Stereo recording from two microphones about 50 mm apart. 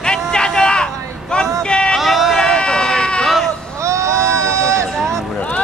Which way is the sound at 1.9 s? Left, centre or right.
Centre.